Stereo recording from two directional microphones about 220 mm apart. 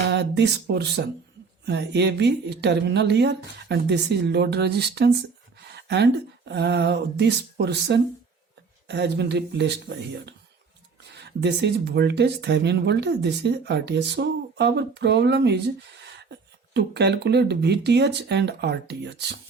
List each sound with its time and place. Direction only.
0.1 s speech: 50° right (ahead or behind)
5.7 s a sound: 50° right (ahead or behind)
6.5 s speech: 50° right (ahead or behind)
16.7 s speech: 50° right (ahead or behind)